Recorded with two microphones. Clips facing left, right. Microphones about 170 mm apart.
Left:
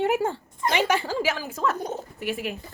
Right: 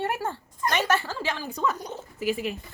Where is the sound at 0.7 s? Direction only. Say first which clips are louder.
Left 2 dB; 15° left (ahead or behind).